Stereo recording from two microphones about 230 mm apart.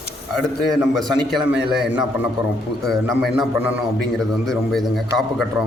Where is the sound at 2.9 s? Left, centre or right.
Centre.